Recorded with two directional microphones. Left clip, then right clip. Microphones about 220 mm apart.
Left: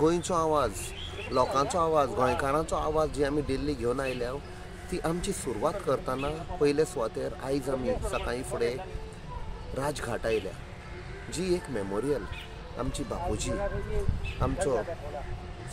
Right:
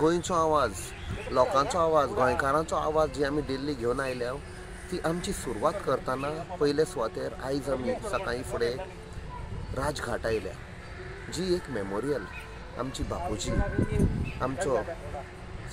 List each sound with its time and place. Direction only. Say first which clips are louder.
0.0 s speech: right 1 dB; 20° left (ahead or behind)
9.8 s speech: right 1 dB; 15° left (ahead or behind)